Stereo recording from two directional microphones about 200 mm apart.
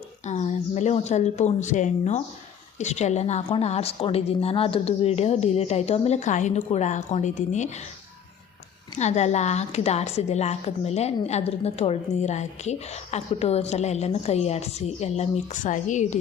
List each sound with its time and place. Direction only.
0.3 s a woman's voice: 35° left (ahead or behind)
9.0 s a woman's voice: 35° left (ahead or behind)